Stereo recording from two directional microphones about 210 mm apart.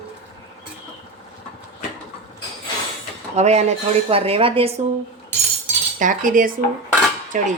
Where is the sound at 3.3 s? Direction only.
30° right (ahead or behind).